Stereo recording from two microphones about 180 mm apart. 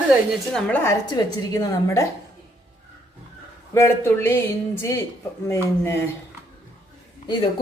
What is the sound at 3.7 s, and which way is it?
Speech, 15° left (ahead or behind).